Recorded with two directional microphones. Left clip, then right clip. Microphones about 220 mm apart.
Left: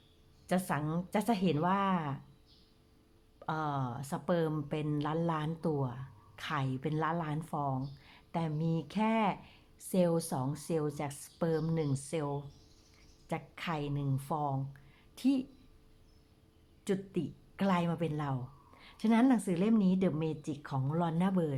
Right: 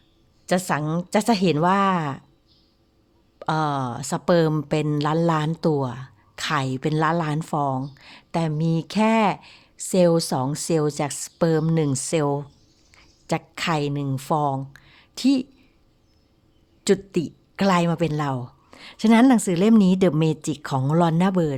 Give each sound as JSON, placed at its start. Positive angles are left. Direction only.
{"t": 0.4, "sound": "speech", "side_deg": -40}
{"t": 3.3, "sound": "a woman's voice", "side_deg": -40}
{"t": 16.8, "sound": "a woman's voice", "side_deg": -45}